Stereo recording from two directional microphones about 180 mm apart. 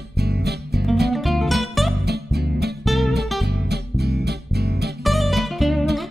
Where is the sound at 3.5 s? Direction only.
65° right (ahead or behind).